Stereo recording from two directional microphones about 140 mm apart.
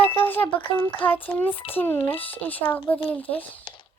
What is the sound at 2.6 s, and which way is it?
Speech, 40° left (ahead or behind).